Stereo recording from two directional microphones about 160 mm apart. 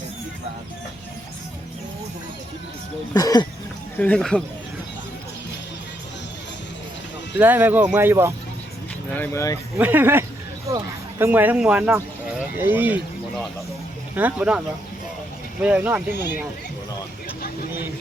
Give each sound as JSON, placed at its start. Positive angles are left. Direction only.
{"t": 3.2, "sound": "speech", "side_deg": 25}
{"t": 3.9, "sound": "speech", "side_deg": 10}
{"t": 7.3, "sound": "speech", "side_deg": -10}
{"t": 9.1, "sound": "speech", "side_deg": 15}
{"t": 9.7, "sound": "speech", "side_deg": -10}
{"t": 14.2, "sound": "speech", "side_deg": -10}
{"t": 15.6, "sound": "speech", "side_deg": -10}